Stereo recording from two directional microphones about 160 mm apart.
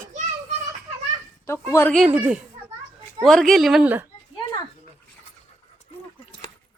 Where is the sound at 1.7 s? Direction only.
15° left (ahead or behind).